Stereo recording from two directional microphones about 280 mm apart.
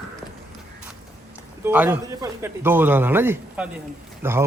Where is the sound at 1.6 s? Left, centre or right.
Centre.